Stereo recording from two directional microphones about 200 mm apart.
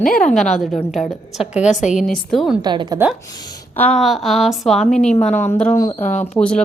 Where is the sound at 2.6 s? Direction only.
20° right (ahead or behind).